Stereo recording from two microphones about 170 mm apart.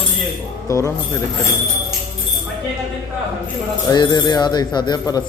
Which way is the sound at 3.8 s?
25° left (ahead or behind).